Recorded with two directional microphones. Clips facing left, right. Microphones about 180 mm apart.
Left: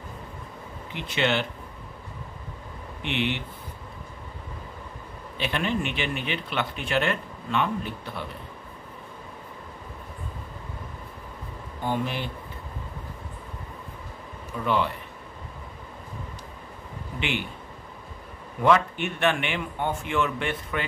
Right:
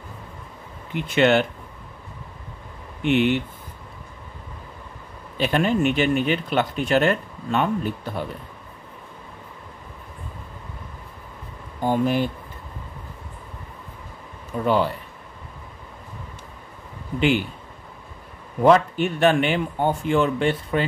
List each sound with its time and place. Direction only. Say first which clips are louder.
0.9 s speech: right 8 dB; 50° right (ahead or behind)
3.0 s speech: right 9 dB; 45° right (ahead or behind)
5.4 s speech: right 7 dB; 40° right (ahead or behind)
11.8 s speech: right 8 dB; 45° right (ahead or behind)
14.6 s a man's voice: right 5 dB; 40° right (ahead or behind)
18.6 s a man's voice: right 5 dB; 35° right (ahead or behind)